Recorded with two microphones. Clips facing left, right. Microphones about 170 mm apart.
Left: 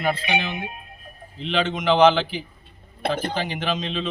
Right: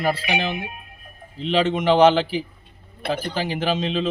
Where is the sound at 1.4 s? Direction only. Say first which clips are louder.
Right 4 dB; 40° right (ahead or behind).